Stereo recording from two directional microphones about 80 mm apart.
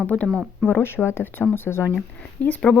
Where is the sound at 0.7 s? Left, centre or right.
Left.